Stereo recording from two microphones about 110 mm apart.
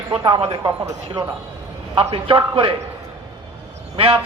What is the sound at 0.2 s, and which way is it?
Speech, 45° right (ahead or behind).